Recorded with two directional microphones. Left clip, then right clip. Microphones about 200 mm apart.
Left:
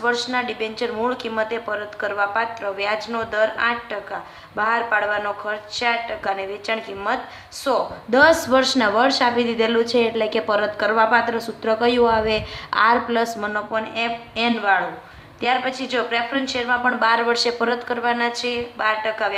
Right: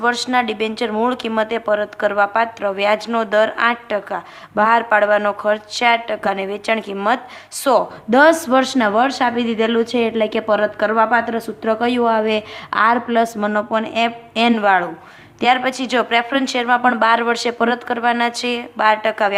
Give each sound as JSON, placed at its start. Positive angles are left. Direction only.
{"t": 0.0, "sound": "speech", "side_deg": -50}